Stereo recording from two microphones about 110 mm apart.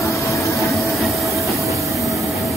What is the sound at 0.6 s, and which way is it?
Train, centre (ahead or behind).